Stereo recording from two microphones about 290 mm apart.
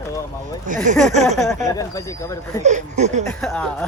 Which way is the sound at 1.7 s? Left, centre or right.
Centre.